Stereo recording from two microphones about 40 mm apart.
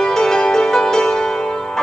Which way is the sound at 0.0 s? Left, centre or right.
Centre.